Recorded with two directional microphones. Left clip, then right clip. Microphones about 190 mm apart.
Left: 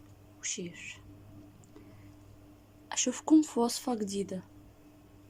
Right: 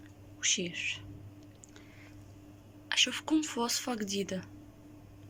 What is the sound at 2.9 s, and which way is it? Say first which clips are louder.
Speech: left 1 dB; 30° left (ahead or behind).